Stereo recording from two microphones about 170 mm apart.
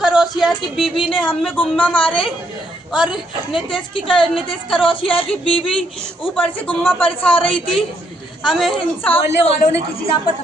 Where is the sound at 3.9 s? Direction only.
30° left (ahead or behind).